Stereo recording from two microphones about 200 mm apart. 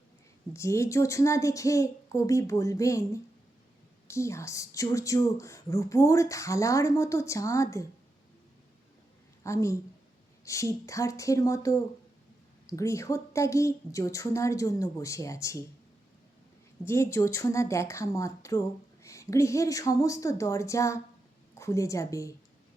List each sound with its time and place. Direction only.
0.5 s speech: 15° left (ahead or behind)
9.4 s a woman's voice: 15° left (ahead or behind)
16.8 s a woman's voice: 15° left (ahead or behind)